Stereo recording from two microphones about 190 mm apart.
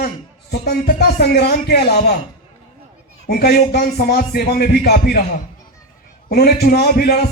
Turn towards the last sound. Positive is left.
turn(degrees=55)  # may be behind; listen again after turning